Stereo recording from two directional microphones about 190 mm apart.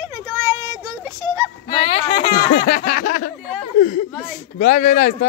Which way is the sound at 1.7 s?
30° left (ahead or behind).